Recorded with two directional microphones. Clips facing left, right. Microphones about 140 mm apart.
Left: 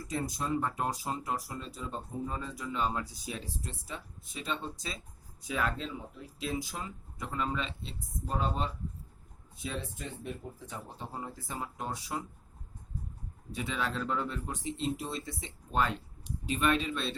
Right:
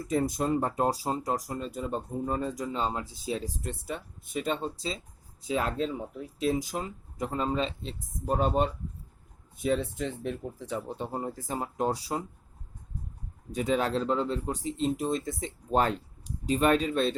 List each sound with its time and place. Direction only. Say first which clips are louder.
0.1 s speech: right 8 dB; 55° right (ahead or behind)
0.5 s speech: right 2 dB; 35° right (ahead or behind)
1.5 s speech: right 7 dB; 50° right (ahead or behind)
2.7 s speech: right 2 dB; 25° right (ahead or behind)
3.5 s speech: right 6 dB; 55° right (ahead or behind)
5.4 s speech: right 5 dB; 25° right (ahead or behind)
5.6 s speech: right 5 dB; 40° right (ahead or behind); by 11.0 s 80° right
11.1 s speech: right 6 dB; 50° right (ahead or behind)
13.5 s speech: right 8 dB; 40° right (ahead or behind)
14.0 s speech: right 6 dB; 30° right (ahead or behind); by 17.2 s 45° right (ahead or behind)